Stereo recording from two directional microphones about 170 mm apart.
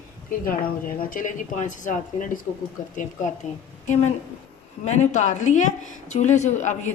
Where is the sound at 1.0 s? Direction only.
55° left (ahead or behind).